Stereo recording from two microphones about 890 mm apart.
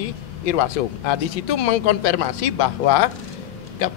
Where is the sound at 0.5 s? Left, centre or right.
Left.